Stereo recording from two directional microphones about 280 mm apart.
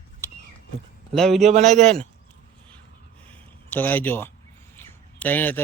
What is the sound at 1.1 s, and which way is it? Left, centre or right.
Speech, centre.